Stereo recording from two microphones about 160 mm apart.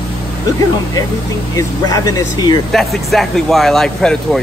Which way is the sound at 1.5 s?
20° left (ahead or behind).